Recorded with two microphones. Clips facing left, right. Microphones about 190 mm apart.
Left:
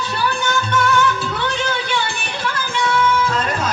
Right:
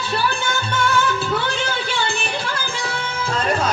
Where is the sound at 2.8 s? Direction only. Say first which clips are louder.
Left 9 dB; 30° right (ahead or behind).